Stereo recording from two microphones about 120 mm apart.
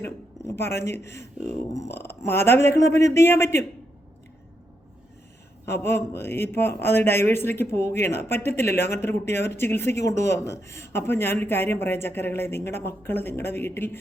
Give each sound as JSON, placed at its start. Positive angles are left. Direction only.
{"t": 0.0, "sound": "a man's voice", "side_deg": 20}
{"t": 5.6, "sound": "a man's voice", "side_deg": 20}